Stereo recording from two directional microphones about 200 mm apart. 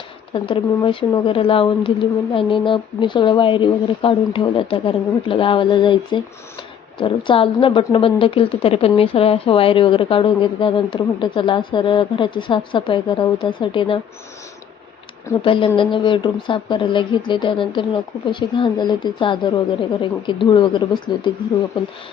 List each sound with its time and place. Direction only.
0.3 s a woman's voice: 25° left (ahead or behind)
15.4 s a woman's voice: 25° left (ahead or behind)